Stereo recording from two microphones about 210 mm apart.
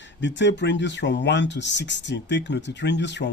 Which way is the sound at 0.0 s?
60° left (ahead or behind).